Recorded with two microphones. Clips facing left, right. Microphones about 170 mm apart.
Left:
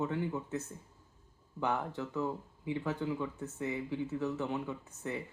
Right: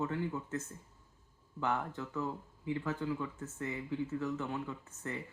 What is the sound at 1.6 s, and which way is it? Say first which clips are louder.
Speech: left 1 dB; 15° left (ahead or behind).